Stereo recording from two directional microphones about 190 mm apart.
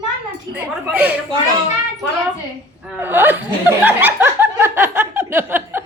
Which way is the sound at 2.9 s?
10° right (ahead or behind).